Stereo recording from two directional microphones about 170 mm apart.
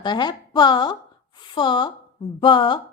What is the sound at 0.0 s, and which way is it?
A woman's voice, 25° left (ahead or behind).